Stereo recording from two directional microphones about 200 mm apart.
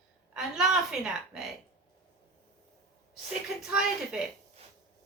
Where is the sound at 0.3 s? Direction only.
Centre (ahead or behind).